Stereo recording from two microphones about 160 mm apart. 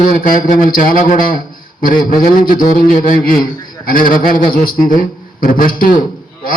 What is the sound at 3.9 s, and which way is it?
Speech, 60° left (ahead or behind).